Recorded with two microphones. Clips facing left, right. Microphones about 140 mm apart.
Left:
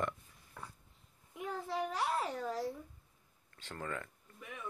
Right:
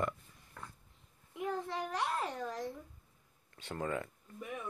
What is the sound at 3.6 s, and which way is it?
Speech, 15° right (ahead or behind).